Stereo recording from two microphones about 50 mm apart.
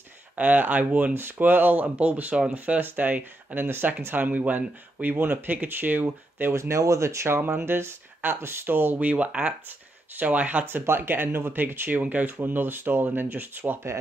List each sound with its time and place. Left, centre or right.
0.4 s speech: right
1.1 s speech: right
3.6 s speech: right
6.5 s speech: right
7.4 s speech: right
9.0 s speech: right
9.3 s speech: centre
10.1 s speech: right
10.6 s speech: right
12.0 s speech: right
12.4 s speech: right